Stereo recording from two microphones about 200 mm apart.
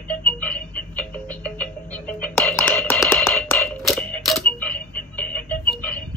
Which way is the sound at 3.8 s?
Centre (ahead or behind).